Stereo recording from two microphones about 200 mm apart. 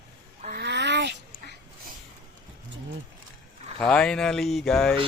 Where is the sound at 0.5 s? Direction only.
60° right (ahead or behind).